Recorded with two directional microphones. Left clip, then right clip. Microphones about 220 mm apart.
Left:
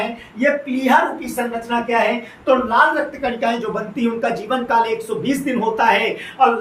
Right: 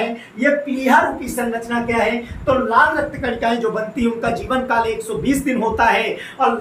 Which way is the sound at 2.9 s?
5° right (ahead or behind).